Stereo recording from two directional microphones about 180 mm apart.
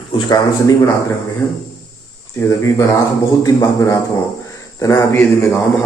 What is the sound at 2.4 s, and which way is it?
A man's voice, 15° left (ahead or behind).